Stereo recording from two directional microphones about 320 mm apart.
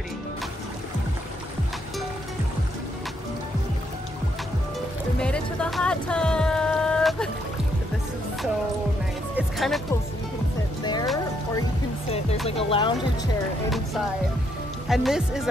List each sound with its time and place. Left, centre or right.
5.2 s music: centre
9.3 s music: centre
10.8 s music: centre
12.4 s speech: centre
14.9 s speech: centre